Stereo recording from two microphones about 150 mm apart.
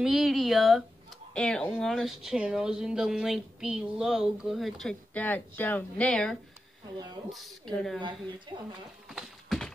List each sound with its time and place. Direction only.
0.0 s speech: centre (ahead or behind)
8.5 s speech: 30° right (ahead or behind)
9.1 s a sound: centre (ahead or behind)